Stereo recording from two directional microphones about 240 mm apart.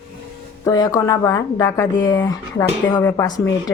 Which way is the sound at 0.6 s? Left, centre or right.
Centre.